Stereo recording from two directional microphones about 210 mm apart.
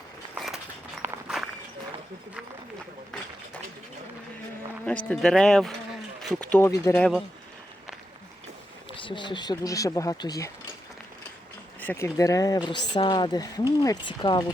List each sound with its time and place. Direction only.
0.3 s a sound: centre (ahead or behind)
1.0 s walk: centre (ahead or behind)
4.9 s speech: 5° left (ahead or behind)
9.0 s speech: 25° left (ahead or behind)
11.8 s speech: 10° left (ahead or behind)